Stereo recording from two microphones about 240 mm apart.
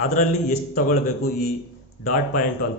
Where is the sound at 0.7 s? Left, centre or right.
Left.